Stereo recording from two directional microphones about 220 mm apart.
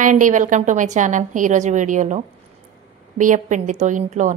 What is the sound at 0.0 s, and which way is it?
A woman's voice, 35° right (ahead or behind).